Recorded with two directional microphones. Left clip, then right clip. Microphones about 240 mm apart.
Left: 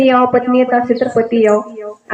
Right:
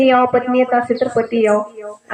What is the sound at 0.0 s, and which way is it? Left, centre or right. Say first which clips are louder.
Speech: left 2 dB; left.